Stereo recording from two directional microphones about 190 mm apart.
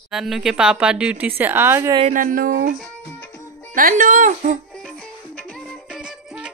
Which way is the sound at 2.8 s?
10° left (ahead or behind).